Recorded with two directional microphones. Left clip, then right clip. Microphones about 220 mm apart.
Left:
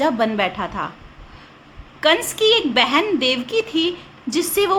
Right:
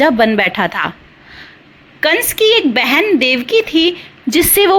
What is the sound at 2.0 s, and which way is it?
A woman's voice, 25° right (ahead or behind).